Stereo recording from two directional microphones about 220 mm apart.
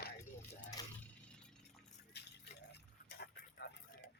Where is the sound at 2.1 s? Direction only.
50° left (ahead or behind).